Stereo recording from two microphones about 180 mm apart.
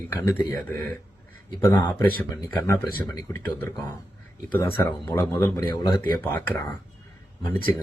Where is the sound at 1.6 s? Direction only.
15° left (ahead or behind).